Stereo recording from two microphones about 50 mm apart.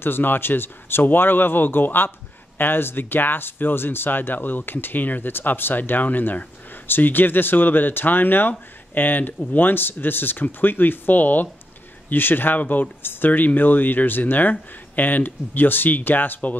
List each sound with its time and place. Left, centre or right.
0.0 s speech: left